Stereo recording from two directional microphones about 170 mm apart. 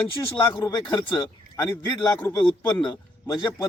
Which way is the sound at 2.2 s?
15° left (ahead or behind).